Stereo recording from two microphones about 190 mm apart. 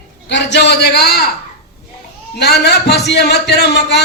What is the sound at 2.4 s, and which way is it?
A man's voice, 60° left (ahead or behind).